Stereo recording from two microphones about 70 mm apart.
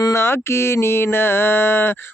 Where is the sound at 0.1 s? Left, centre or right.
Left.